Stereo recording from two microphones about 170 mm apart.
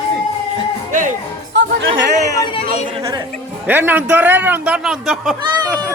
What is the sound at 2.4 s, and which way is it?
Speech, 30° left (ahead or behind).